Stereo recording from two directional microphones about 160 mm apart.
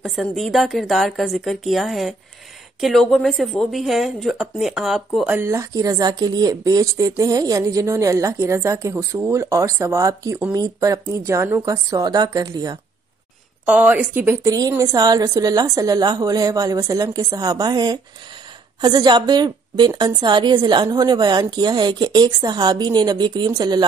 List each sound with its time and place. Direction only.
0.0 s a woman's voice: centre (ahead or behind); by 12.7 s 25° right (ahead or behind)
13.7 s a woman's voice: 10° right (ahead or behind); by 23.8 s 25° right (ahead or behind)